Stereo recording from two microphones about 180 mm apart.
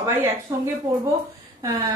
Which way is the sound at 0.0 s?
15° right (ahead or behind).